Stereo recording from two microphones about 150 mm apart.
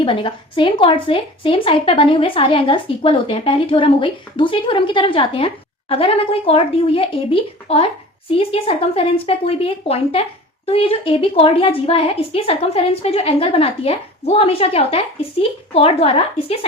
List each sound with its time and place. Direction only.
0.0 s a woman's voice: 35° left (ahead or behind)